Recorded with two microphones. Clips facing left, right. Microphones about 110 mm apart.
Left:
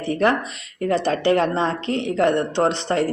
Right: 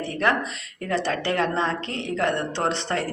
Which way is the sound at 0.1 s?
20° left (ahead or behind).